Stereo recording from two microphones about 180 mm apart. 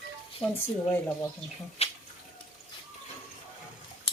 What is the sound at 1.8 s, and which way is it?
Water, 35° left (ahead or behind).